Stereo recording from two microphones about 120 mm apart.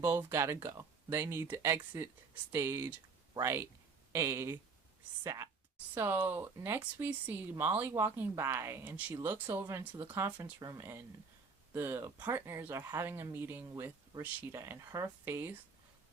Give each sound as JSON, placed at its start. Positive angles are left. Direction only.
{"t": 0.0, "sound": "a woman's voice", "side_deg": -15}